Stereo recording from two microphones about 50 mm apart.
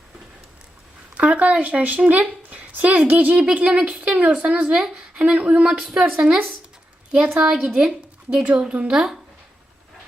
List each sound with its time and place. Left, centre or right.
1.1 s a woman's voice: right
8.7 s speech: right